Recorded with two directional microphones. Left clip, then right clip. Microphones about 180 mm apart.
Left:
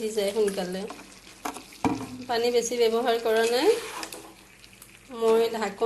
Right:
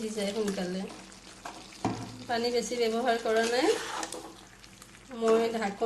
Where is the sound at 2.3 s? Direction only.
20° left (ahead or behind).